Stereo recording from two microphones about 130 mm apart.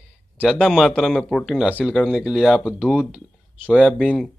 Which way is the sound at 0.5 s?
5° left (ahead or behind).